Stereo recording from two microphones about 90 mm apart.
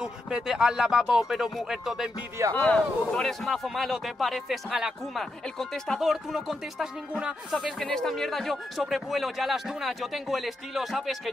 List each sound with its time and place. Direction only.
0.0 s speech: 10° right (ahead or behind)
2.5 s a man's voice: 15° left (ahead or behind)
3.2 s speech: 5° left (ahead or behind)
7.8 s speech: 5° left (ahead or behind)